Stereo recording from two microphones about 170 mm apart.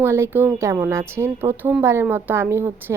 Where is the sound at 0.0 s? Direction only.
15° right (ahead or behind).